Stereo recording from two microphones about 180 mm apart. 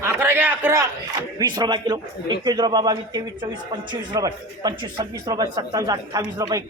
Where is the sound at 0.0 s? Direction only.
10° right (ahead or behind).